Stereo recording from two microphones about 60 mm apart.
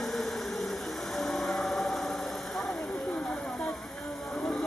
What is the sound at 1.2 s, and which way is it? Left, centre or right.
Vehicle, centre.